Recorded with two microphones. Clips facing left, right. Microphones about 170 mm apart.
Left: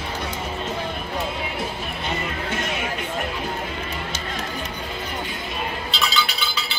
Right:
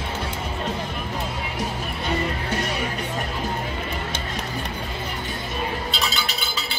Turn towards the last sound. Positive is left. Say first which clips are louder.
# left 1 dB
turn(degrees=-50)  # may be behind; listen again after turning